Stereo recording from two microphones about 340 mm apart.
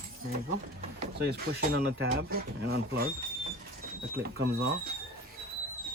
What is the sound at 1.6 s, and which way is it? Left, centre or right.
Speech, right.